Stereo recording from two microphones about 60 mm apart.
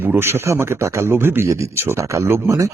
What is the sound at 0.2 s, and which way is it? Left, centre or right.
Speech, right.